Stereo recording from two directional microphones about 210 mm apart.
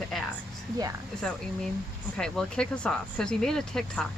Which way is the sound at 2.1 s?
5° left (ahead or behind).